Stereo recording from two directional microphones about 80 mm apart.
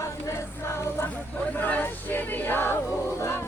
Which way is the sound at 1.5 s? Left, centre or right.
Left.